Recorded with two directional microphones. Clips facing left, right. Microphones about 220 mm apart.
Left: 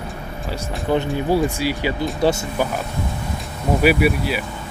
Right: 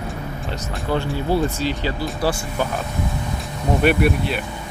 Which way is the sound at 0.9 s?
15° left (ahead or behind).